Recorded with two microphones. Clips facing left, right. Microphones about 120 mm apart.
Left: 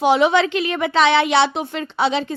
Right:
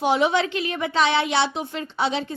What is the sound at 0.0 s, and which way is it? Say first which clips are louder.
A woman's voice: left 5 dB; 90° left.